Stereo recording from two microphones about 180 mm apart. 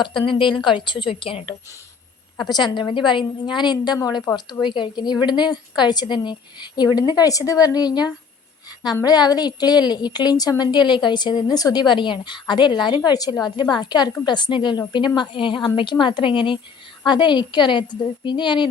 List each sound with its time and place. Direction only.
0.0 s a woman's voice: 25° left (ahead or behind)